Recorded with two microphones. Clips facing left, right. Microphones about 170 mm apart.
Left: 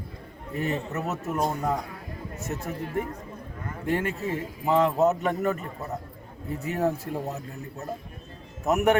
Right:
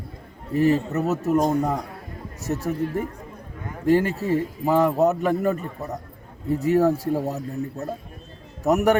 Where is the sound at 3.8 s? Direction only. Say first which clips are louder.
Right 8 dB; 35° right (ahead or behind).